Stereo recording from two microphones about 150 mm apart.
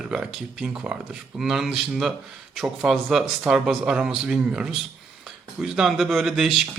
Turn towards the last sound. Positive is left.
turn(degrees=0)  # may be behind; listen again after turning